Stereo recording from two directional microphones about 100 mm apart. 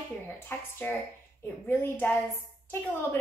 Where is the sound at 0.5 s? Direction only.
20° left (ahead or behind).